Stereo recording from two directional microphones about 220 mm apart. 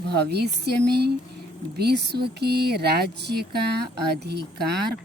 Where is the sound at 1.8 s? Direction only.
50° right (ahead or behind).